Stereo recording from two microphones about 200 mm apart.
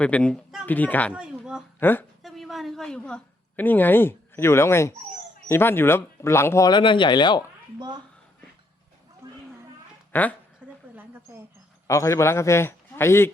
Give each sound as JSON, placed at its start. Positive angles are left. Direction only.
{"t": 0.0, "sound": "speech", "side_deg": 5}
{"t": 1.1, "sound": "a sound", "side_deg": -5}
{"t": 1.8, "sound": "a woman's voice", "side_deg": 10}
{"t": 7.8, "sound": "a woman's voice", "side_deg": -20}
{"t": 9.2, "sound": "a sound", "side_deg": -15}
{"t": 10.1, "sound": "a woman's voice", "side_deg": 10}
{"t": 11.9, "sound": "speech", "side_deg": 15}